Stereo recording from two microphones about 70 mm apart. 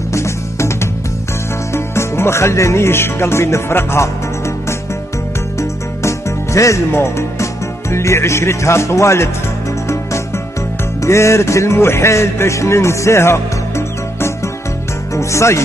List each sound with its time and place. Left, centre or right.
0.1 s music: left
1.7 s speech: left
5.6 s music: left
11.0 s music: left
15.1 s speech: left